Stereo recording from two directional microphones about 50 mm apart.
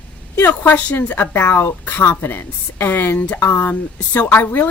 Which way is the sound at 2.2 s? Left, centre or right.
Left.